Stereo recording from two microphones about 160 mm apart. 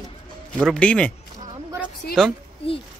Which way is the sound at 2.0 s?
70° left (ahead or behind).